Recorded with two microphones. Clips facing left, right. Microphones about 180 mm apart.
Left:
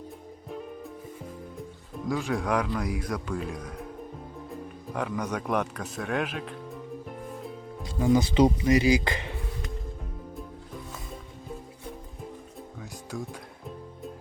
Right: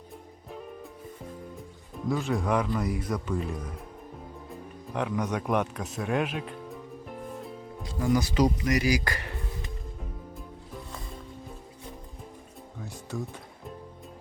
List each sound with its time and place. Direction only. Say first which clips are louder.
2.0 s speech: even; centre (ahead or behind)
4.9 s speech: right 1 dB; 5° right (ahead or behind)
7.9 s speech: left 3 dB; 25° left (ahead or behind)